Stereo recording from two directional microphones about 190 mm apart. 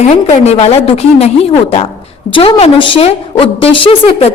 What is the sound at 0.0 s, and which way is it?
A woman's voice, 35° left (ahead or behind).